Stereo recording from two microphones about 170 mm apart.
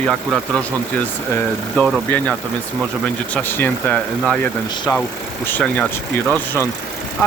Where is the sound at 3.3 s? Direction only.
10° left (ahead or behind).